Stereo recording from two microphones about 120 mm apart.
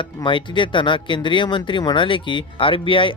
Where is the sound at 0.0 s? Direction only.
40° left (ahead or behind).